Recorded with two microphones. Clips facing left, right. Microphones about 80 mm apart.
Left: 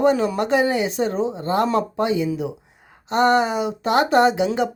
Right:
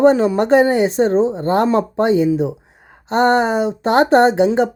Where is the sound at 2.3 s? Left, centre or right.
Right.